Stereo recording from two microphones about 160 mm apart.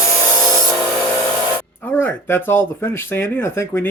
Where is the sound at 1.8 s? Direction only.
15° left (ahead or behind).